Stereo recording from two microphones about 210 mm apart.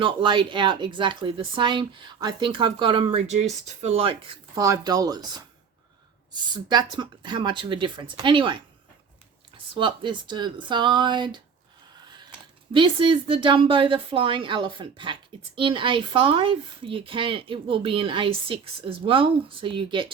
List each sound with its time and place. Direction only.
0.0 s speech: 20° right (ahead or behind)
9.7 s speech: 25° right (ahead or behind)
12.7 s speech: 25° right (ahead or behind)